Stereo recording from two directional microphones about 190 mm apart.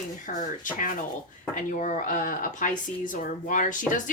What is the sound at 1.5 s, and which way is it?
Speech, 45° left (ahead or behind).